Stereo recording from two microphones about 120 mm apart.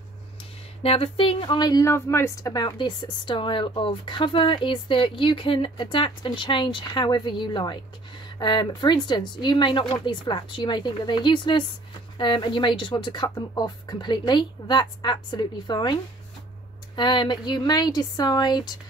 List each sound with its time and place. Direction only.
0.8 s speech: 50° left (ahead or behind); by 2.5 s 20° left (ahead or behind)
2.5 s speech: 40° left (ahead or behind)